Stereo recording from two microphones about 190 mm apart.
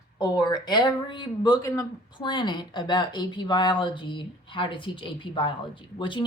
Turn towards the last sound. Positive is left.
turn(degrees=25)  # may be behind; listen again after turning